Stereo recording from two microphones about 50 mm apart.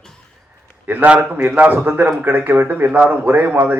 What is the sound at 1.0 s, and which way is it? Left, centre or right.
A man's voice, right.